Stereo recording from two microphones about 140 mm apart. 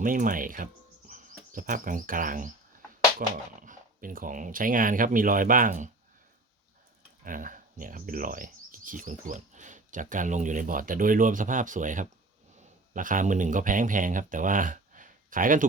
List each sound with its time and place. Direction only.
0.0 s speech: 75° right (ahead or behind)
3.7 s speech: 80° right
7.3 s speech: 75° right (ahead or behind)